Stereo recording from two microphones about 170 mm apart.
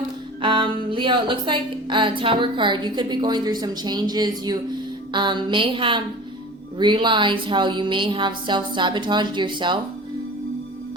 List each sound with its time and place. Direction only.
0.4 s music: 30° right (ahead or behind)